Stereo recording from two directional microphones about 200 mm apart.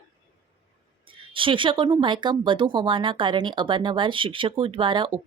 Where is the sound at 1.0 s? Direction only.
25° right (ahead or behind).